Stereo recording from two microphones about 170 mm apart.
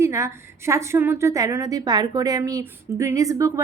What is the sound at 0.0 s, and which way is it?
A woman's voice, 15° right (ahead or behind).